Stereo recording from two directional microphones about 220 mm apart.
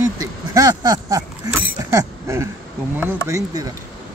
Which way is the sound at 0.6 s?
20° right (ahead or behind).